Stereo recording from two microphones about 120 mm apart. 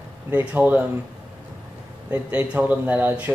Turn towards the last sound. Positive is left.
turn(degrees=-15)  # may be behind; listen again after turning